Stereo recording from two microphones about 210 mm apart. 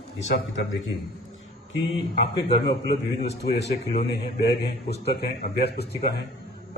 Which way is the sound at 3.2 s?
55° left (ahead or behind).